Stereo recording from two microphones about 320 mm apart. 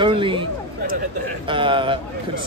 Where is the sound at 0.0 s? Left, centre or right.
Centre.